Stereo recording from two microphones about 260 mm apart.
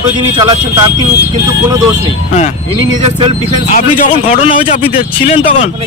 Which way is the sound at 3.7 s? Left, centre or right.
Left.